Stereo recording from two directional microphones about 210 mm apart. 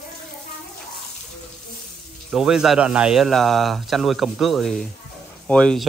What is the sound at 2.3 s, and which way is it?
Speech, 5° right (ahead or behind).